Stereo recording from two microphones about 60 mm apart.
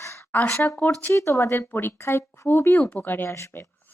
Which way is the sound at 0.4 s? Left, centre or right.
Left.